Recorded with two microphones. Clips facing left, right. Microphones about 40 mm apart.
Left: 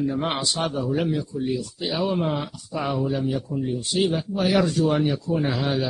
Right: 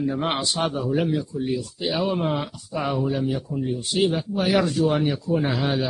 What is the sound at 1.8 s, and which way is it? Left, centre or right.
Speech, centre.